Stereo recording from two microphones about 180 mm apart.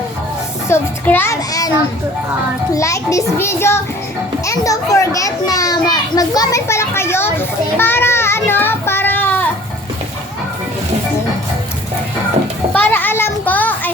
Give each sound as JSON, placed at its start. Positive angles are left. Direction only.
{"t": 0.7, "sound": "a child's voice", "side_deg": 10}
{"t": 2.7, "sound": "a child's voice", "side_deg": 15}
{"t": 12.7, "sound": "a sound", "side_deg": 10}